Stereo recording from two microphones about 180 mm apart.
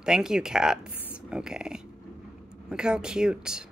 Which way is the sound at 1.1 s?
5° right (ahead or behind).